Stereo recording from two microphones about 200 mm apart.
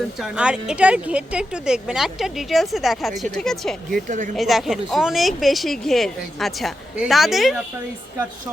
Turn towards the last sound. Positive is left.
turn(degrees=0)  # may be behind; listen again after turning